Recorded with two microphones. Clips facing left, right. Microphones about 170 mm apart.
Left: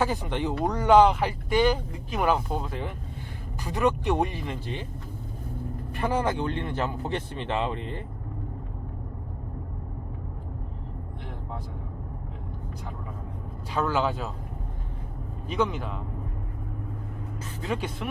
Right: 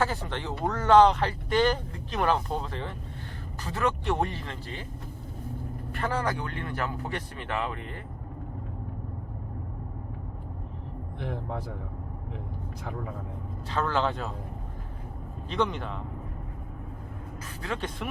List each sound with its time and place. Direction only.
0.0 s speech: 15° left (ahead or behind)
5.9 s speech: 15° left (ahead or behind)
13.7 s speech: 10° left (ahead or behind)
15.4 s speech: 5° left (ahead or behind)
17.6 s speech: 15° left (ahead or behind)